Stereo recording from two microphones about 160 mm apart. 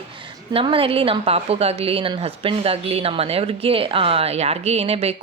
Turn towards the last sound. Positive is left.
turn(degrees=-40)  # may be behind; listen again after turning